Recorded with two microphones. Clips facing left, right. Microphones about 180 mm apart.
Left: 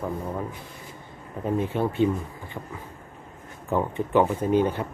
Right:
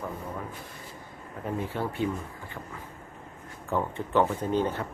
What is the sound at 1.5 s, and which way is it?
Speech, 20° left (ahead or behind).